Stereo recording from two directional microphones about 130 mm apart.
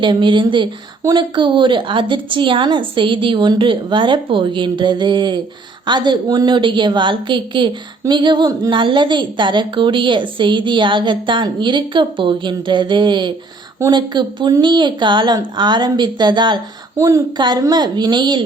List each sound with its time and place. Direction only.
0.0 s a woman's voice: 40° right (ahead or behind)